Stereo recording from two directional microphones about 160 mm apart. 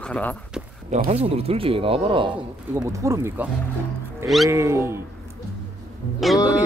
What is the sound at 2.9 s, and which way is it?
Speech, 20° right (ahead or behind).